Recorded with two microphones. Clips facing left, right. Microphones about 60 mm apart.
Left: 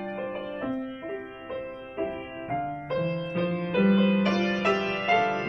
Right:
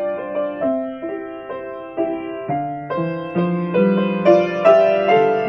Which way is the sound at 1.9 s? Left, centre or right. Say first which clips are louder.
Right 11 dB; right.